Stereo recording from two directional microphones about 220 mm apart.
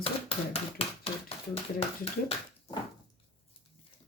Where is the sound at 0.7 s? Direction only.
25° left (ahead or behind).